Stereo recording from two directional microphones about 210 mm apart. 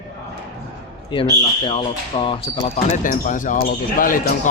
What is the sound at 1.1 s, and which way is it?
Speech, 25° left (ahead or behind).